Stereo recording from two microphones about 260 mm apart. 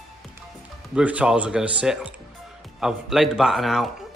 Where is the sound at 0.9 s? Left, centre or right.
Centre.